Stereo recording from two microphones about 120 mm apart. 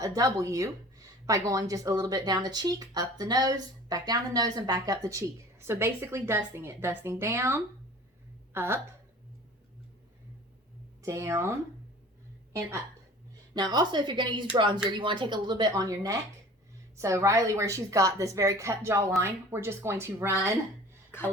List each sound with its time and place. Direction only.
0.0 s speech: 30° right (ahead or behind)
11.0 s speech: 25° right (ahead or behind)
13.5 s speech: 35° right (ahead or behind)